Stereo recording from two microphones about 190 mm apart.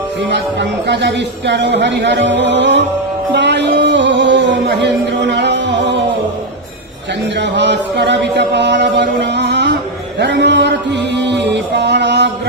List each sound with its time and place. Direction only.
0.3 s speech: 65° right (ahead or behind)
3.3 s music: 65° right (ahead or behind)
7.3 s chant: 65° right (ahead or behind)
10.2 s music: 65° right (ahead or behind)